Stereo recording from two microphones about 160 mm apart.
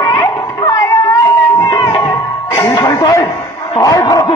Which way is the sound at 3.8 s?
20° left (ahead or behind).